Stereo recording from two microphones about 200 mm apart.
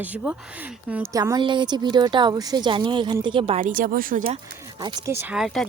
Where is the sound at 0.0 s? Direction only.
10° right (ahead or behind); by 3.6 s 25° right (ahead or behind).